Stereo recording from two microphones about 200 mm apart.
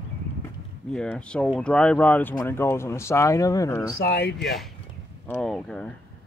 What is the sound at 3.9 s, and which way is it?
Speech, 55° left (ahead or behind).